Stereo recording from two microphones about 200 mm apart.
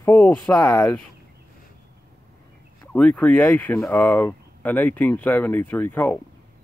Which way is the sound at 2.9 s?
5° left (ahead or behind).